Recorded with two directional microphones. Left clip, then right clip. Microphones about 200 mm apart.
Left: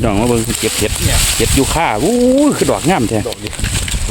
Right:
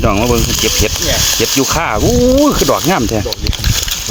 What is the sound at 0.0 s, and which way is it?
Speech, 10° left (ahead or behind).